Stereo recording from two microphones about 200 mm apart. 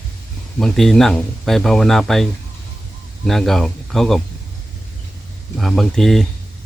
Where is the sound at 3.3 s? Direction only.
Centre (ahead or behind).